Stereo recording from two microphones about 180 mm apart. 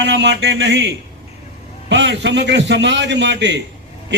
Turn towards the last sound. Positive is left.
turn(degrees=-75)  # may be behind; listen again after turning